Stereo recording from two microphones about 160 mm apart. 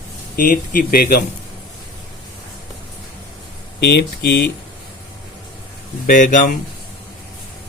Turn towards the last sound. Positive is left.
turn(degrees=55)  # may be behind; listen again after turning